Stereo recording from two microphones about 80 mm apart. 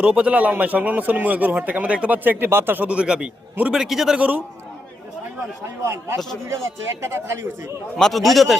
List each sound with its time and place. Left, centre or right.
0.0 s a man's voice: centre
5.8 s speech: right
7.9 s a man's voice: centre